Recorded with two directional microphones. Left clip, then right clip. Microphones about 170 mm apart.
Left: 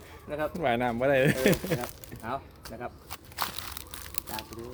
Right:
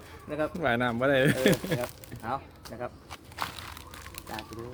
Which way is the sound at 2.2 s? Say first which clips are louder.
Right 1 dB; 15° right (ahead or behind).